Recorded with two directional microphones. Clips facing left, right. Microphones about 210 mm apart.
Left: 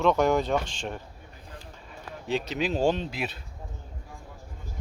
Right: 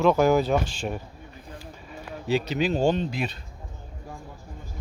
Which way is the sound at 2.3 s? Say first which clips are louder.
Right 4 dB; centre (ahead or behind).